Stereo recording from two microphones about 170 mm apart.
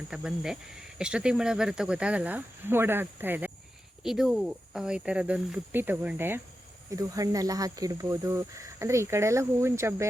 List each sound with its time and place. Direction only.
0.1 s speech: 5° right (ahead or behind)